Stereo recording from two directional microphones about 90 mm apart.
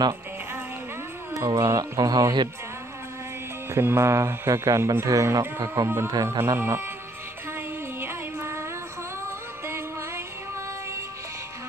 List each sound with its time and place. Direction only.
1.3 s music: 35° right (ahead or behind)
1.7 s speech: 45° right (ahead or behind)
3.7 s speech: 30° right (ahead or behind)
7.5 s music: 25° right (ahead or behind)
9.7 s music: 25° right (ahead or behind)